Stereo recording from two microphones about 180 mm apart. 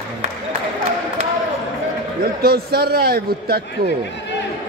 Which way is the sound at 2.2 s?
60° right (ahead or behind).